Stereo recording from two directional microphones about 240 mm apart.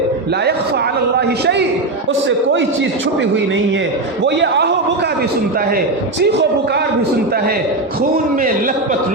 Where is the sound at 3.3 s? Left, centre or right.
Right.